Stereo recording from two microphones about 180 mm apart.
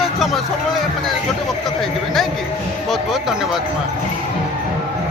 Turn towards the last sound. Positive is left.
turn(degrees=0)  # may be behind; listen again after turning